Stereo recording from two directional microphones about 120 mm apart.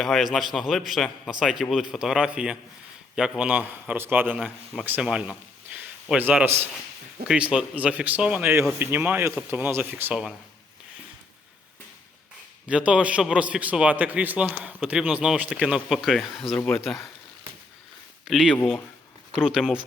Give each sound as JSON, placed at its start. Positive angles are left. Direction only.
{"t": 0.0, "sound": "a man's voice", "side_deg": 0}
{"t": 4.4, "sound": "a man's voice", "side_deg": 0}
{"t": 4.9, "sound": "a man's voice", "side_deg": -10}
{"t": 7.3, "sound": "a man's voice", "side_deg": -10}
{"t": 12.6, "sound": "a man's voice", "side_deg": -10}
{"t": 16.6, "sound": "speech", "side_deg": 15}
{"t": 16.8, "sound": "a man's voice", "side_deg": 0}
{"t": 18.3, "sound": "a man's voice", "side_deg": 0}